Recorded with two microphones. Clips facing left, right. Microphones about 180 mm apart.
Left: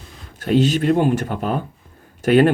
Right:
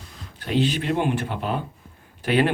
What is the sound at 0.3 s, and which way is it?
Speech, 45° left (ahead or behind).